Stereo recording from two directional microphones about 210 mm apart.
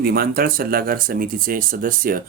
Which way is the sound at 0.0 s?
45° right (ahead or behind).